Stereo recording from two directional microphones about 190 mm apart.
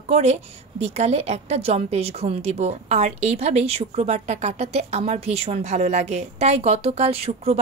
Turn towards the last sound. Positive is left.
turn(degrees=-30)  # may be behind; listen again after turning